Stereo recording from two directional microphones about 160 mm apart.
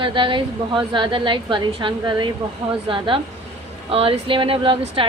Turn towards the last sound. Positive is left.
turn(degrees=-35)  # may be behind; listen again after turning